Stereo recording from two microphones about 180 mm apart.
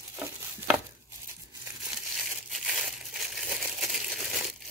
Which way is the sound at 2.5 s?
Centre (ahead or behind).